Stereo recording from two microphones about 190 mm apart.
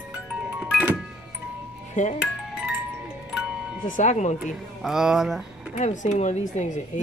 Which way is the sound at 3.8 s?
40° left (ahead or behind).